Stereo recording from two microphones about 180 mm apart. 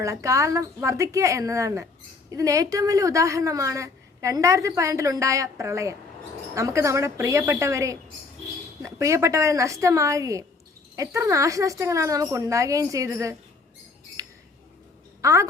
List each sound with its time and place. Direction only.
0.0 s a woman's voice: 15° right (ahead or behind)
14.2 s a sound: 20° right (ahead or behind)
15.2 s speech: 15° right (ahead or behind)